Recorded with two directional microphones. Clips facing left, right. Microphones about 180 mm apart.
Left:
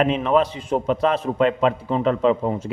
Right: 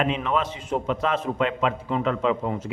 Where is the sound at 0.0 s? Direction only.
35° left (ahead or behind).